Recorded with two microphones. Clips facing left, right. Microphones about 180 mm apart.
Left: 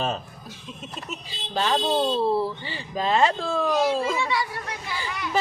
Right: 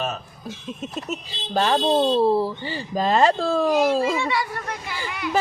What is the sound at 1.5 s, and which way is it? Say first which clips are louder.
Speech: right 4 dB; 45° right (ahead or behind).